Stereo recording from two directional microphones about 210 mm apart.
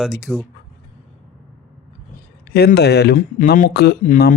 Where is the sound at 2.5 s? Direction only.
50° left (ahead or behind).